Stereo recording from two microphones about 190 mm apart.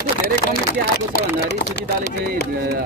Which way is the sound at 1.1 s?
55° left (ahead or behind).